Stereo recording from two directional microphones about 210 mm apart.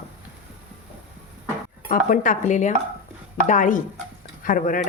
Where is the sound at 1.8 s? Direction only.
40° left (ahead or behind).